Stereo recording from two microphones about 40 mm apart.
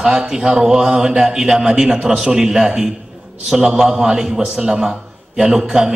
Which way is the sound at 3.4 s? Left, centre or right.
Centre.